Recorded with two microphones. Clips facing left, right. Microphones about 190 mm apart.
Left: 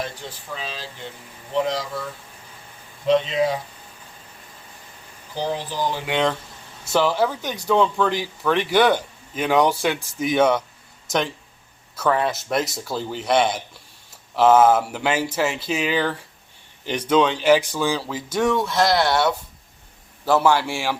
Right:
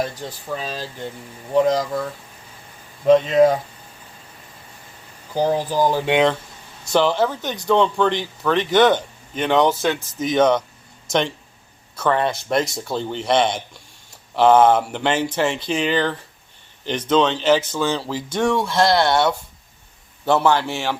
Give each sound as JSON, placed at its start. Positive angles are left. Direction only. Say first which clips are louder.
{"t": 0.2, "sound": "speech", "louder": "right 5 dB", "side_deg": -40}
{"t": 3.1, "sound": "speech", "louder": "right 6 dB", "side_deg": -50}
{"t": 5.3, "sound": "speech", "louder": "right 7 dB", "side_deg": -45}
{"t": 6.8, "sound": "speech", "louder": "right 2 dB", "side_deg": 5}
{"t": 20.2, "sound": "speech", "louder": "right 1 dB", "side_deg": 5}